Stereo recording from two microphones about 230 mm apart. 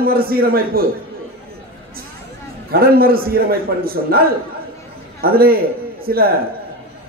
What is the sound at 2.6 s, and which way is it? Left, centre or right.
A man's voice, right.